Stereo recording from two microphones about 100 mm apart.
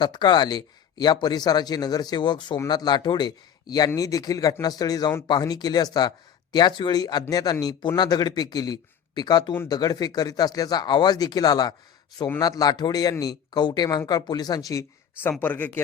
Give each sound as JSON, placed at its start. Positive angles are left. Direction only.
{"t": 0.0, "sound": "speech", "side_deg": 50}
{"t": 15.2, "sound": "speech", "side_deg": 20}